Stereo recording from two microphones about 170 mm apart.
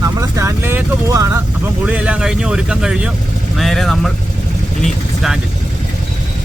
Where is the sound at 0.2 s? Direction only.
15° right (ahead or behind); by 5.4 s centre (ahead or behind).